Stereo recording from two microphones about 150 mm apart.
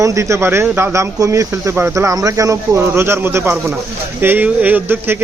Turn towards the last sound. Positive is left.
turn(degrees=-15)  # may be behind; listen again after turning